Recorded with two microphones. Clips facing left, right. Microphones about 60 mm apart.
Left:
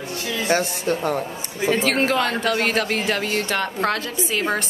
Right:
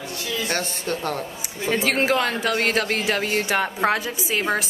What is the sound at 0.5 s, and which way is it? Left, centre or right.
Speech, centre.